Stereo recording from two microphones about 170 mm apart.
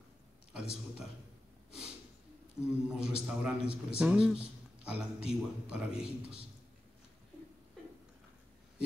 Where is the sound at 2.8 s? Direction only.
5° right (ahead or behind).